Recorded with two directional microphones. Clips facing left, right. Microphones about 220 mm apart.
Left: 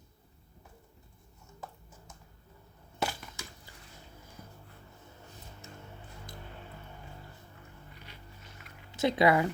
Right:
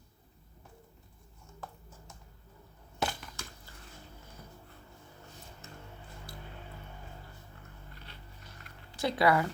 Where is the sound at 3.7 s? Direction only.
15° left (ahead or behind).